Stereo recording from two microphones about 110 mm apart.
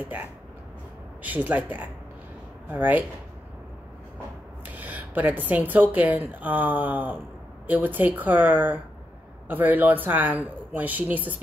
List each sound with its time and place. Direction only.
0.1 s a woman's voice: 15° right (ahead or behind)
4.7 s a woman's voice: 15° right (ahead or behind)